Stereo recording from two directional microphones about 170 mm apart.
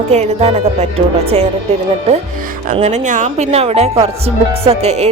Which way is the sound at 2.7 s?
40° right (ahead or behind).